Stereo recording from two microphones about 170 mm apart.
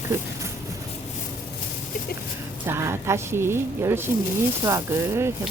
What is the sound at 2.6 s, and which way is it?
Speech, 15° right (ahead or behind).